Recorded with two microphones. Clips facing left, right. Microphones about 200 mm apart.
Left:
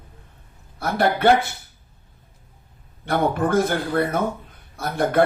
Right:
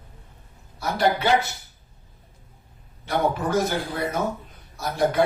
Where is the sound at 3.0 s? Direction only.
55° left (ahead or behind).